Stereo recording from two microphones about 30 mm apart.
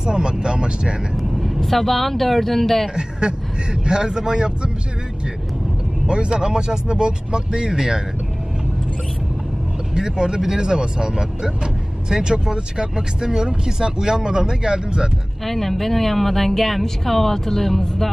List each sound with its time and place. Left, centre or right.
0.0 s speech: right
1.1 s speech: centre
2.9 s speech: right
6.1 s speech: right
9.9 s speech: right
15.4 s speech: centre